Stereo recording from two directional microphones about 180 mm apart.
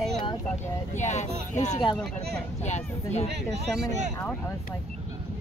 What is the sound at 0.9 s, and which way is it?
Speech, 40° left (ahead or behind).